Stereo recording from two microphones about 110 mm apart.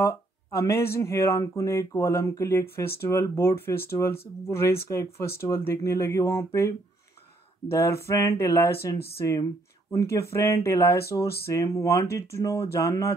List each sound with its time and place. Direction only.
0.0 s speech: 25° left (ahead or behind)
7.7 s speech: 25° left (ahead or behind)